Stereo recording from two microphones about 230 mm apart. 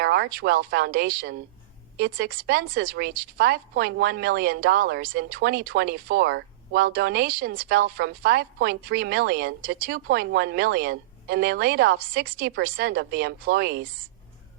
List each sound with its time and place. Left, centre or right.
0.0 s speech: right